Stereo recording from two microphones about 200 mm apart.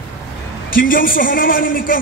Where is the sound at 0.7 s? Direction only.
45° left (ahead or behind).